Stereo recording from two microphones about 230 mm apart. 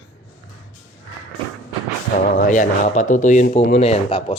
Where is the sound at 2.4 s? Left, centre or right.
Left.